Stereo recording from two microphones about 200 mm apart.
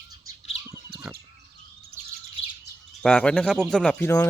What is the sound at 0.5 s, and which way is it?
Bird, 15° right (ahead or behind).